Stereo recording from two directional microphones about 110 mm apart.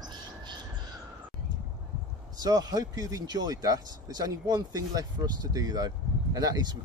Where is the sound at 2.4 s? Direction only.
35° right (ahead or behind).